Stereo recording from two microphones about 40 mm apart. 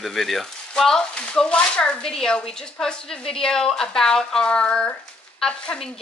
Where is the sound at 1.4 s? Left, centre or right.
Left.